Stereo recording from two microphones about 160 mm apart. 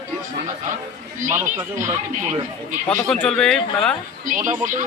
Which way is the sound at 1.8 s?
15° right (ahead or behind).